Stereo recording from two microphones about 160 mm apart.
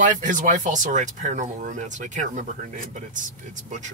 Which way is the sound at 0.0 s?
55° right (ahead or behind).